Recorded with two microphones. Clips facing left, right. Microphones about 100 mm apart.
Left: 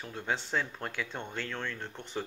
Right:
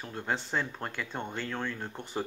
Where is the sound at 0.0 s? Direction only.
Centre (ahead or behind).